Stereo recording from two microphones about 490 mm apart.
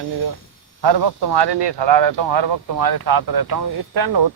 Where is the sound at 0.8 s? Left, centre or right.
Right.